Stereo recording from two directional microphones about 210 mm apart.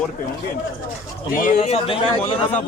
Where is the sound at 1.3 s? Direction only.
35° left (ahead or behind).